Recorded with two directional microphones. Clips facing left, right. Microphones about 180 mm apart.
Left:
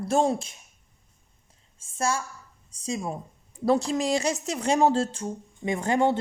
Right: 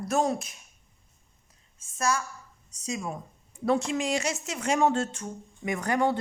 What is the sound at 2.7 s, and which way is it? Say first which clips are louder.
Speech: left 3 dB; 30° left (ahead or behind).